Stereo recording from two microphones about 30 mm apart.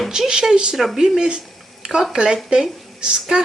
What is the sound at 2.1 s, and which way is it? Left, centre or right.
A woman's voice, right.